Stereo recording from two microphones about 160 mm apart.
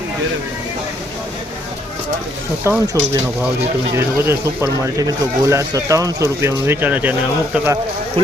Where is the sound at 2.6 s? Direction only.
15° right (ahead or behind).